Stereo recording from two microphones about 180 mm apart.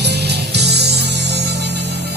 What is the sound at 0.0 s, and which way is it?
Music, 65° right (ahead or behind).